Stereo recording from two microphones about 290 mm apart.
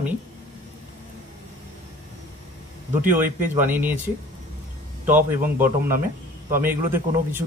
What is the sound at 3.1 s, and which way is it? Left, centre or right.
Speech, centre.